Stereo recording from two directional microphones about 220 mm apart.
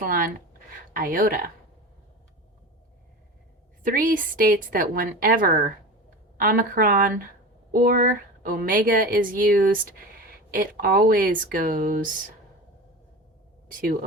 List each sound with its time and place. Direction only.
0.0 s a woman's voice: 40° right (ahead or behind)
3.8 s a woman's voice: 40° right (ahead or behind)